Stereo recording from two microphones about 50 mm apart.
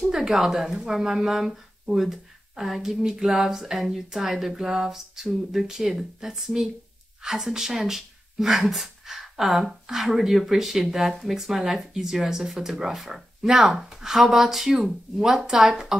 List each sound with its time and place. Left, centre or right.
0.1 s speech: centre